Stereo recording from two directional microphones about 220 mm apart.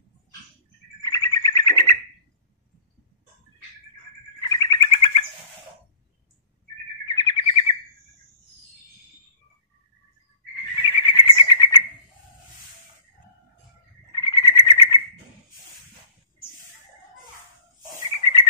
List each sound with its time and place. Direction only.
1.0 s frog: 15° left (ahead or behind)
4.4 s bird: 20° left (ahead or behind)
7.2 s bird: 20° left (ahead or behind)
10.8 s bird: 20° left (ahead or behind)
14.1 s frog: 20° left (ahead or behind)